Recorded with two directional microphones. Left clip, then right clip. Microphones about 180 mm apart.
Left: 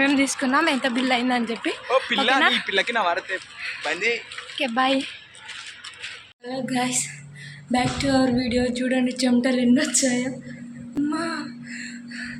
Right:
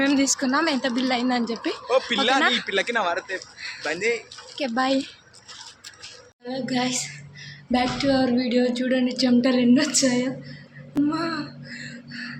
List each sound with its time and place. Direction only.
0.0 s speech: 5° left (ahead or behind)
2.0 s speech: 10° right (ahead or behind)
3.6 s speech: centre (ahead or behind)
3.8 s speech: 20° right (ahead or behind)
4.5 s speech: centre (ahead or behind)
6.5 s speech: centre (ahead or behind)
11.1 s music: 10° right (ahead or behind)